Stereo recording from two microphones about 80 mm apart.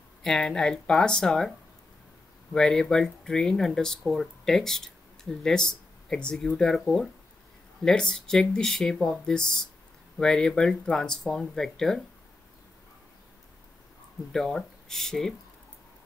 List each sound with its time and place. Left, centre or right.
0.2 s speech: centre
2.5 s speech: centre
14.3 s speech: centre